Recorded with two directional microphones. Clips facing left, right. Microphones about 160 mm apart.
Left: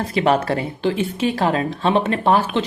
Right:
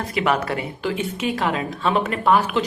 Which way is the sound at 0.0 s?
30° left (ahead or behind).